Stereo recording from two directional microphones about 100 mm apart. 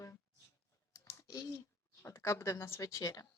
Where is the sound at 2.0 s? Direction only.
30° left (ahead or behind).